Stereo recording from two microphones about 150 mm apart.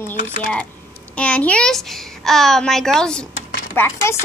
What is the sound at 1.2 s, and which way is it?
Speech, 10° left (ahead or behind).